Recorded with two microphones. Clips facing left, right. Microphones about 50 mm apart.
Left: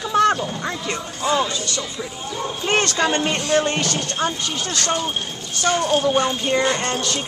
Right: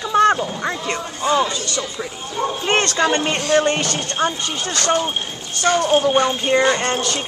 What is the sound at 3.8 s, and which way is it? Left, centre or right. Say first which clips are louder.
Speech: right 2 dB; centre.